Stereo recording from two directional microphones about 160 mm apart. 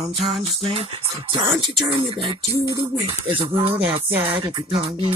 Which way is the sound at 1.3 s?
30° right (ahead or behind).